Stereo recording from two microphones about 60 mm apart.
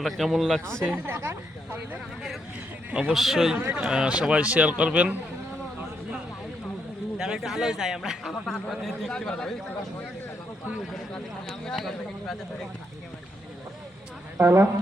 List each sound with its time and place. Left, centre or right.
0.0 s speech: centre
0.9 s speech: right
3.1 s a man's voice: centre
7.2 s a man's voice: centre
11.1 s speech: centre
14.3 s speech: right